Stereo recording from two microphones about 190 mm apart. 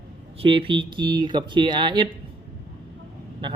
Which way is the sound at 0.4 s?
25° right (ahead or behind).